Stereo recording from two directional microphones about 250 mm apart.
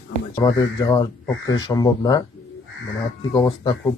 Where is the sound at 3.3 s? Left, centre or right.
Centre.